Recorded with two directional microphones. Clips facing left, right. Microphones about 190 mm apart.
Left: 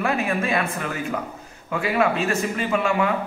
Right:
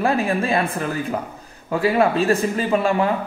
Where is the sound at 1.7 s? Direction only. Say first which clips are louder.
Right 4 dB; 35° right (ahead or behind).